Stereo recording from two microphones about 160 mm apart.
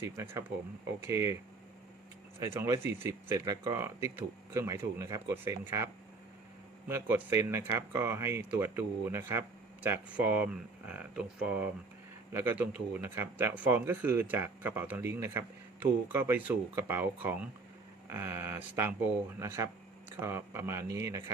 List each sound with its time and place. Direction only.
0.0 s speech: 15° right (ahead or behind)
2.4 s speech: 15° right (ahead or behind)